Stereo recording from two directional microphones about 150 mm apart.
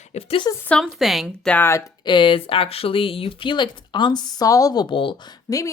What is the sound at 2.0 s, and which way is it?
Speech, 30° left (ahead or behind).